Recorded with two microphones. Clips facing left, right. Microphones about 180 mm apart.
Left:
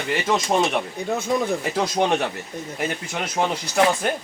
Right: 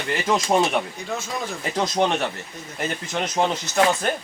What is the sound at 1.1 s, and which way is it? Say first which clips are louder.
Speech: left 8 dB; 60° left (ahead or behind).